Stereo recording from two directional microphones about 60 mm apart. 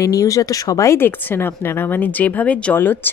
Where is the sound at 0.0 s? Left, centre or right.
Left.